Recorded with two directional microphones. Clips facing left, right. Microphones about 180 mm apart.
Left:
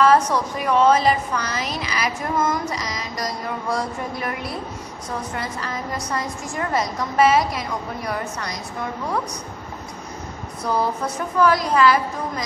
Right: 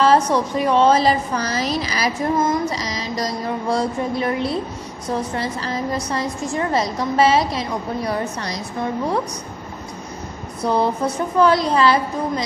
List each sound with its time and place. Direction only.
0.0 s a woman's voice: 30° right (ahead or behind)
10.6 s a woman's voice: 25° right (ahead or behind)